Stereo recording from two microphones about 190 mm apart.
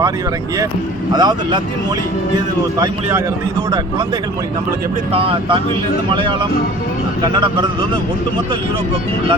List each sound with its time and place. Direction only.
1.1 s a man's voice: 20° right (ahead or behind)
5.1 s speech: 30° right (ahead or behind)